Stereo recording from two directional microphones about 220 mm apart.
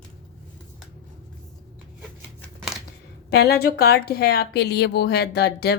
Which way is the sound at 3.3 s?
45° left (ahead or behind).